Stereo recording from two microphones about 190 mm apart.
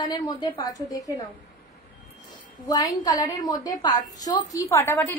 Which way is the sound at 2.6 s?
20° left (ahead or behind).